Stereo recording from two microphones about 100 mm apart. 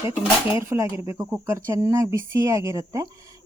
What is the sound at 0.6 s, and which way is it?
Speech, 30° right (ahead or behind).